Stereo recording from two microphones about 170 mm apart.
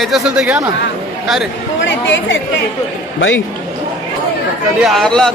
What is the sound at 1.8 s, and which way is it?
Speech, 90° left.